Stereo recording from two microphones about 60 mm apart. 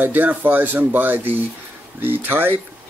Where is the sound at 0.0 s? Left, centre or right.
Right.